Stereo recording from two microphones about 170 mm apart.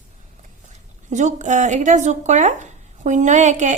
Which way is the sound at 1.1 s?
45° right (ahead or behind).